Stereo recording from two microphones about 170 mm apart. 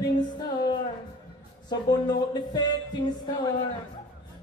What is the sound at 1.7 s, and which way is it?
Speech, 25° left (ahead or behind).